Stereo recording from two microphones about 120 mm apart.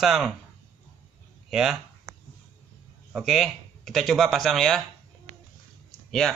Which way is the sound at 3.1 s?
Centre (ahead or behind).